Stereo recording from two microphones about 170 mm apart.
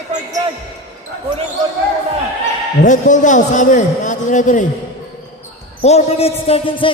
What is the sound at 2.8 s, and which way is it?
A man's voice, 45° left (ahead or behind).